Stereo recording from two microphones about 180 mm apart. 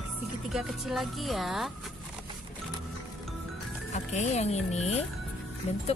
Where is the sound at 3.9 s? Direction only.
40° left (ahead or behind).